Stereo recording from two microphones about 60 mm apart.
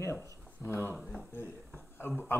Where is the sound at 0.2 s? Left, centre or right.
Left.